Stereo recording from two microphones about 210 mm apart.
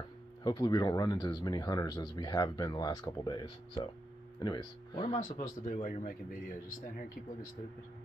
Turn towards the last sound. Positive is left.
turn(degrees=40)  # may be behind; listen again after turning